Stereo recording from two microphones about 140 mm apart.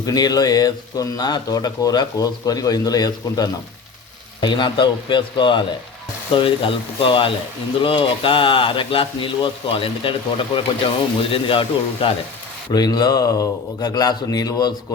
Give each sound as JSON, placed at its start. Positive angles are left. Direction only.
{"t": 0.0, "sound": "speech", "side_deg": 25}
{"t": 12.7, "sound": "speech", "side_deg": 30}